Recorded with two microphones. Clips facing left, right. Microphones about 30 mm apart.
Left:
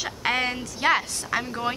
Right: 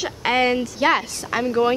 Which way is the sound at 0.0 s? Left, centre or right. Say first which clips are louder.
Right 5 dB; centre.